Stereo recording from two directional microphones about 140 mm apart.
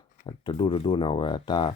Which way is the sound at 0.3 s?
40° left (ahead or behind).